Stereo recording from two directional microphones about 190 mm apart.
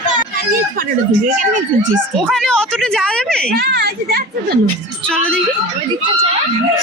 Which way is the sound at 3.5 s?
60° right (ahead or behind).